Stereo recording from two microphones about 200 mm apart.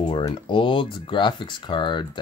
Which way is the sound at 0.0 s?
20° left (ahead or behind).